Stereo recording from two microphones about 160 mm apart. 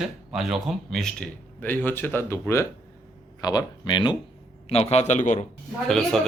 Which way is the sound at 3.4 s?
25° left (ahead or behind).